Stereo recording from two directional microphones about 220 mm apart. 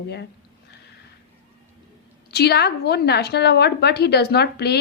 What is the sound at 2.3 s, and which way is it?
A woman's voice, 50° left (ahead or behind).